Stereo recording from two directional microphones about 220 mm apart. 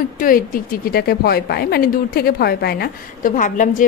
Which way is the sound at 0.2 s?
40° left (ahead or behind).